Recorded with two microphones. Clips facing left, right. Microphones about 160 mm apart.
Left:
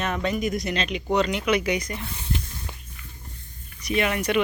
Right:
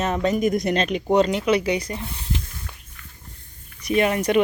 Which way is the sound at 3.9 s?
40° right (ahead or behind).